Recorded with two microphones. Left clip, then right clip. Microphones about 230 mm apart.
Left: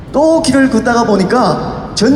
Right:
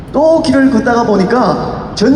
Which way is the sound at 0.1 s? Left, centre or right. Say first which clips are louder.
Right 1 dB; left.